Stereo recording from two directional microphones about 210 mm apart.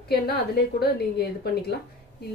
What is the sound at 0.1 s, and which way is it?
Speech, 50° left (ahead or behind).